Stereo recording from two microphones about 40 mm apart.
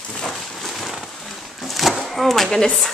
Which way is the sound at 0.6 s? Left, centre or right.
Centre.